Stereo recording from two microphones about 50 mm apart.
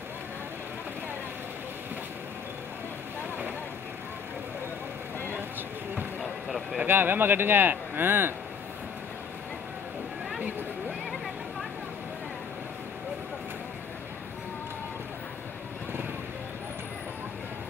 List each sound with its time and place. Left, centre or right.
6.9 s speech: right